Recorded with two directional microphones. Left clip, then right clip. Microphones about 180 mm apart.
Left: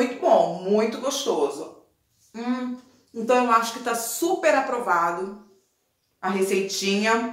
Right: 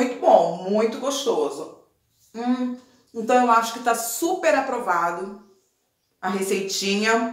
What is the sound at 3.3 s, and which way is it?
Speech, 10° right (ahead or behind).